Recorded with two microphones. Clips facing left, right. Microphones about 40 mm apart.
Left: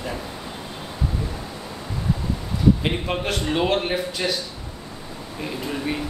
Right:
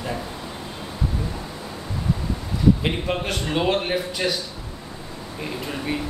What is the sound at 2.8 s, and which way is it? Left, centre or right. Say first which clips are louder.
A man's voice: even; centre.